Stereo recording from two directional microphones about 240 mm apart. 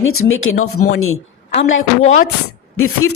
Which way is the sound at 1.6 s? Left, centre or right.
Left.